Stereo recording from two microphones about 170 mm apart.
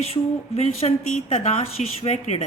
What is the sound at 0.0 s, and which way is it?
A woman's voice, 40° left (ahead or behind).